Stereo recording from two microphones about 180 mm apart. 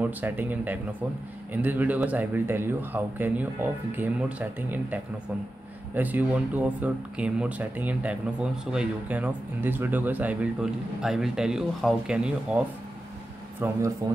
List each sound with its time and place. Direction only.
0.0 s speech: 10° right (ahead or behind)